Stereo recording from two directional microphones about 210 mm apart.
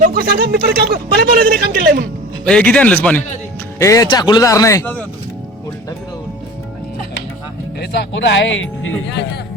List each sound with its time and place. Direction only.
0.0 s speech: 45° right (ahead or behind)
2.4 s a man's voice: 5° left (ahead or behind)
7.8 s speech: 55° left (ahead or behind)